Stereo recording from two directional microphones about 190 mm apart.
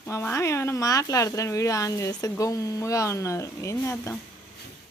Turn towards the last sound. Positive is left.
turn(degrees=15)  # may be behind; listen again after turning